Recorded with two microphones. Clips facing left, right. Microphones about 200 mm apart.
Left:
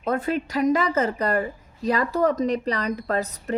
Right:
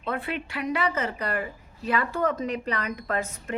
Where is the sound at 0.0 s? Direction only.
40° left (ahead or behind).